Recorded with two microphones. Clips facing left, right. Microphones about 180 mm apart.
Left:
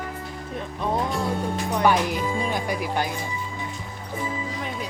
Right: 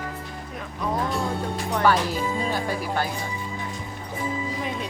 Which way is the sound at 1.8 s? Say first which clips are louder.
Even; 15° left (ahead or behind).